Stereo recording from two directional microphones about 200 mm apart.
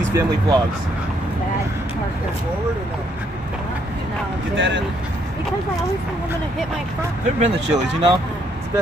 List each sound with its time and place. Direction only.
0.1 s speech: 15° right (ahead or behind)
4.6 s speech: 65° right (ahead or behind)
7.3 s speech: 35° right (ahead or behind)